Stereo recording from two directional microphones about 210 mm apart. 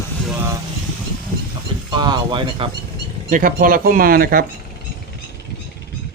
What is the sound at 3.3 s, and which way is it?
Speech, 40° right (ahead or behind).